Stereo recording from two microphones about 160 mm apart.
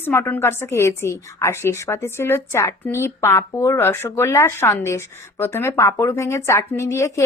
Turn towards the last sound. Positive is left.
turn(degrees=20)  # may be behind; listen again after turning